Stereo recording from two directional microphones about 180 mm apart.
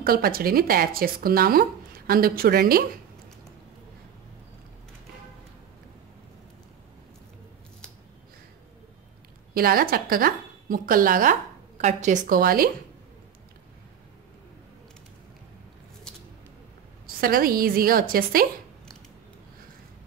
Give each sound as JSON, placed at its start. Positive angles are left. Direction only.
{"t": 0.0, "sound": "speech", "side_deg": -55}
{"t": 9.5, "sound": "speech", "side_deg": -55}
{"t": 17.0, "sound": "speech", "side_deg": -55}